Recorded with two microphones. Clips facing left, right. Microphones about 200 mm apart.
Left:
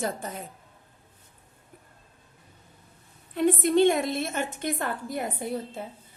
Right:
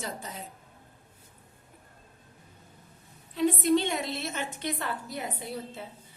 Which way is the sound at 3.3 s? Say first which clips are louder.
Left 1 dB; 55° left (ahead or behind).